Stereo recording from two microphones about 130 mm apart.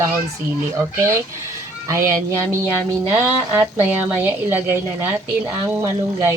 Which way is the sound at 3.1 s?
20° right (ahead or behind).